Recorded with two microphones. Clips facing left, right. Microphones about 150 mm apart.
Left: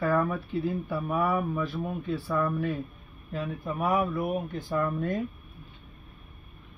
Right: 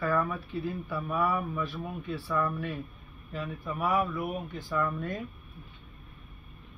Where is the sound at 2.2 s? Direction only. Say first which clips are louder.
Left 2 dB; 40° left (ahead or behind).